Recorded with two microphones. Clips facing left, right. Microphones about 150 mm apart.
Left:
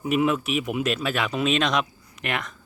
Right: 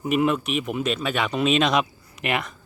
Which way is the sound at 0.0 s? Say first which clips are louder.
Right 1 dB; centre (ahead or behind).